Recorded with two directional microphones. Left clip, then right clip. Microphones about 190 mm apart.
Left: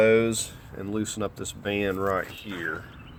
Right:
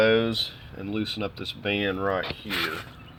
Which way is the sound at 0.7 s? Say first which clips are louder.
Even; 15° left (ahead or behind).